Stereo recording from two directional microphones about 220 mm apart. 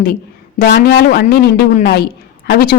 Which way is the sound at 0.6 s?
50° left (ahead or behind).